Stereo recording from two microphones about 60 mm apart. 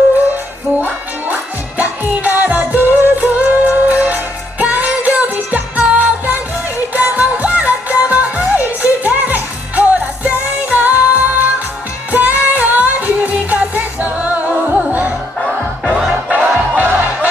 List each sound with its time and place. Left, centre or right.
0.7 s music: right
15.9 s music: centre
16.7 s music: right